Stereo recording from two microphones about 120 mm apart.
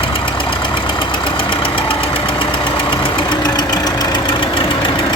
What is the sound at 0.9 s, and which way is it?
Engine, 45° left (ahead or behind).